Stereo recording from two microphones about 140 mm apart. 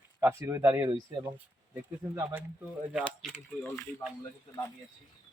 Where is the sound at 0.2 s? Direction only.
20° right (ahead or behind).